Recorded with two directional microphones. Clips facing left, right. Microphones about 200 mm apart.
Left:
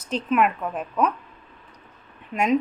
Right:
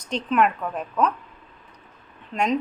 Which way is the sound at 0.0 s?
5° left (ahead or behind).